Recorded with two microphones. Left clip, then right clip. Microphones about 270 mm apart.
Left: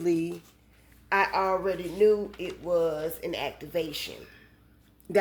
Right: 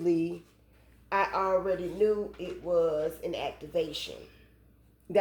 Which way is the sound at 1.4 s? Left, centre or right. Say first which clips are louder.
Left 1 dB; left.